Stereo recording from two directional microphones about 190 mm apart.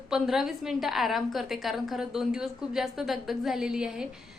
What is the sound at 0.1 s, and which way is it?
A woman's voice, centre (ahead or behind).